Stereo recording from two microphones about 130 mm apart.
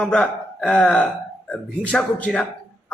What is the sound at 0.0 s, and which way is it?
Speech, 10° left (ahead or behind).